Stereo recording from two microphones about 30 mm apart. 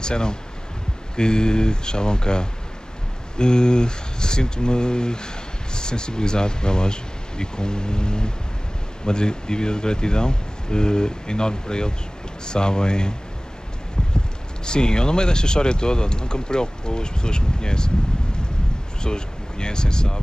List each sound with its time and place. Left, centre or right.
0.0 s speech: left
14.6 s speech: left
18.9 s speech: left